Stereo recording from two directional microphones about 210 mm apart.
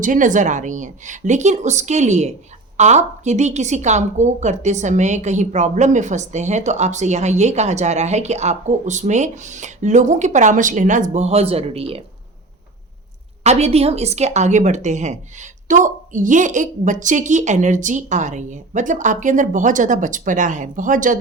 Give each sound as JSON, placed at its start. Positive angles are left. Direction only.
{"t": 0.0, "sound": "a woman's voice", "side_deg": -40}
{"t": 13.4, "sound": "a woman's voice", "side_deg": -30}